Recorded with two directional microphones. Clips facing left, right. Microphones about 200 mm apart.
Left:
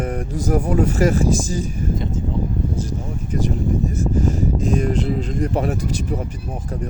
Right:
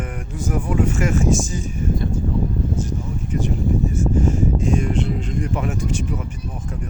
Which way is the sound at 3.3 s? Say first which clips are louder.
Left 1 dB; 40° left (ahead or behind).